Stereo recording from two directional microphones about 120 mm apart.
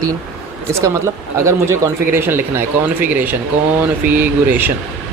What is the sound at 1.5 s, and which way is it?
Speech, 25° right (ahead or behind).